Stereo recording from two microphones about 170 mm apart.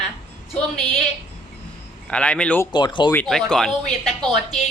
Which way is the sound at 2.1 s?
5° left (ahead or behind).